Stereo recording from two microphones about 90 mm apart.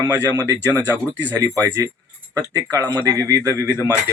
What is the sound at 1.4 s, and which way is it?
Speech, 35° right (ahead or behind).